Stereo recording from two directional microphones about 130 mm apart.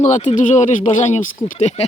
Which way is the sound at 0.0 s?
65° left (ahead or behind).